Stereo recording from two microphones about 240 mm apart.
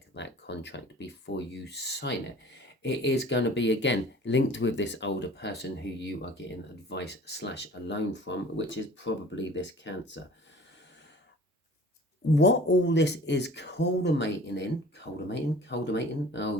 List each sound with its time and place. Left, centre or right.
0.1 s speech: left
12.3 s speech: left